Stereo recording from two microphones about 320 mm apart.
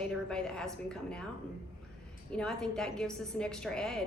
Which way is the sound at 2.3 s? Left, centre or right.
Centre.